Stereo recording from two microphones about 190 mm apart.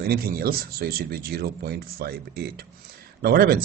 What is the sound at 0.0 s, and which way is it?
Speech, 50° right (ahead or behind).